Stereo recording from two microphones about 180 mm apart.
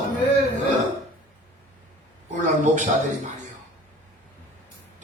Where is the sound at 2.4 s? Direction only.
40° right (ahead or behind).